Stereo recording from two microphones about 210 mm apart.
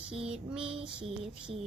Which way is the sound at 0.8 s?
25° right (ahead or behind).